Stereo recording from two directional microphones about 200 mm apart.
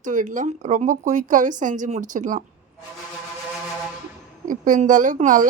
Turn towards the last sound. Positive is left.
turn(degrees=-40)  # may be behind; listen again after turning